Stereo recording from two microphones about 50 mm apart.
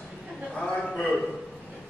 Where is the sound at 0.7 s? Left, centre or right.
Centre.